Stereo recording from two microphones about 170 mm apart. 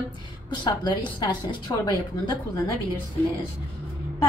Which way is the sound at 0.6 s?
30° left (ahead or behind).